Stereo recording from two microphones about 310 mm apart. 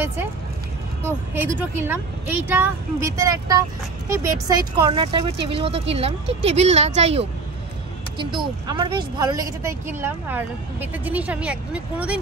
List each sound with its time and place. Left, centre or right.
1.0 s a woman's voice: centre